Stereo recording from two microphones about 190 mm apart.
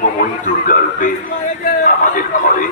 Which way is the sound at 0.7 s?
45° left (ahead or behind).